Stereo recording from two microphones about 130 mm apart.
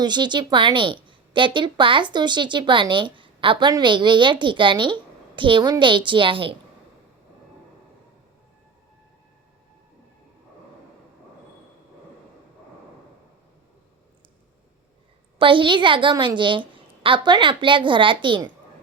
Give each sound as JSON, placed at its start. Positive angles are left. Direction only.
{"t": 0.0, "sound": "a woman's voice", "side_deg": -35}
{"t": 15.4, "sound": "a woman's voice", "side_deg": -40}